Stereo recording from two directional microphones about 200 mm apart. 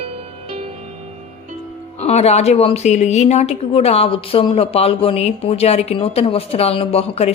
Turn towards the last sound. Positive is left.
turn(degrees=30)  # may be behind; listen again after turning